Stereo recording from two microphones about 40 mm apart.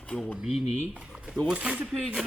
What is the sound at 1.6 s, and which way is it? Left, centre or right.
Speech, right.